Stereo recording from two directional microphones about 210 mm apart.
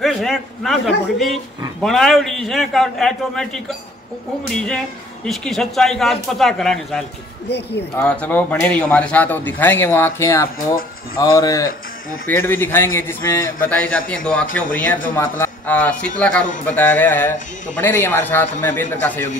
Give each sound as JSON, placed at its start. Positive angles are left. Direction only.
{"t": 0.0, "sound": "a man's voice", "side_deg": 0}
{"t": 7.4, "sound": "speech", "side_deg": 55}
{"t": 7.9, "sound": "a man's voice", "side_deg": 5}